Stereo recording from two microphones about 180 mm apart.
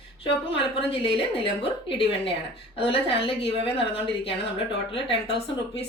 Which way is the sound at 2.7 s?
30° left (ahead or behind).